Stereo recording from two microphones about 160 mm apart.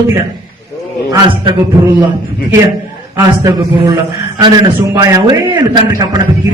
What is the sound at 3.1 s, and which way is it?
A man's voice, 20° right (ahead or behind).